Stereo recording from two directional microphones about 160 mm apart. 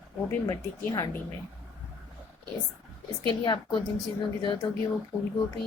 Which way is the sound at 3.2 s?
30° left (ahead or behind).